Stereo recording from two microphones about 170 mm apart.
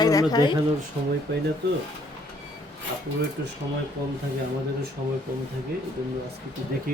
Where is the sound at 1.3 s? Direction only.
70° right (ahead or behind).